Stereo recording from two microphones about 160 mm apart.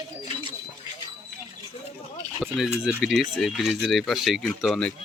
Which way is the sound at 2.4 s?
5° right (ahead or behind).